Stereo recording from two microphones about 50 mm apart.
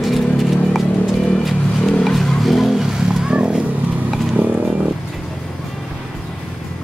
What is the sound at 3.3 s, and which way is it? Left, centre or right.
Vehicle, centre.